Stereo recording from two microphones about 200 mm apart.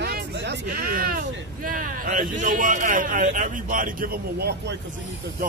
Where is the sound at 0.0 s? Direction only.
55° right (ahead or behind).